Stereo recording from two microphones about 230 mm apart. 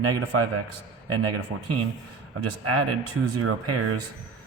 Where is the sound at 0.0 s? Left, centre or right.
Right.